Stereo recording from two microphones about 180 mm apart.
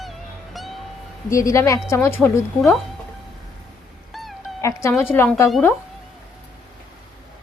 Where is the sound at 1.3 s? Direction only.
15° left (ahead or behind).